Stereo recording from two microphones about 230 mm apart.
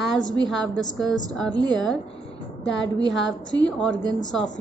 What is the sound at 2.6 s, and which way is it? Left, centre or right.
A woman's voice, left.